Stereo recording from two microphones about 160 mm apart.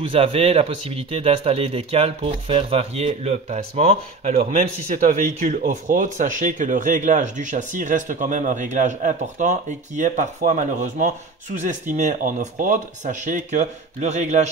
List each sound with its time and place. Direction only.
0.0 s speech: 35° right (ahead or behind)
4.8 s speech: 55° right (ahead or behind)